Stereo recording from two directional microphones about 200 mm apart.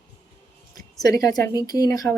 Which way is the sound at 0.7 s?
20° left (ahead or behind).